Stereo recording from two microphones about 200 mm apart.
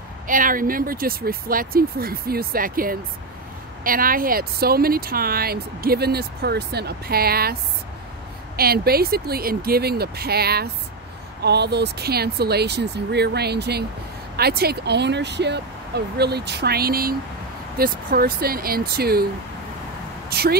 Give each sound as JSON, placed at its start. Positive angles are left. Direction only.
{"t": 0.3, "sound": "speech", "side_deg": -45}
{"t": 8.5, "sound": "speech", "side_deg": -50}
{"t": 20.2, "sound": "speech", "side_deg": -50}